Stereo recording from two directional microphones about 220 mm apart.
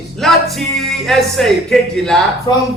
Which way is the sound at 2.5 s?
15° left (ahead or behind).